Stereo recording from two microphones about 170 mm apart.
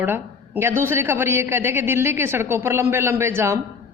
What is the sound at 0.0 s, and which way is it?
Speech, 10° right (ahead or behind).